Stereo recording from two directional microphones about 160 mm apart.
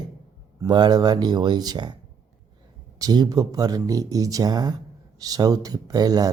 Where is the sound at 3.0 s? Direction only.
25° right (ahead or behind).